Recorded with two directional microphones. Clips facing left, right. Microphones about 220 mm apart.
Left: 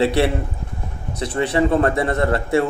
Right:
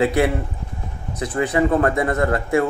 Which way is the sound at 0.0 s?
30° left (ahead or behind).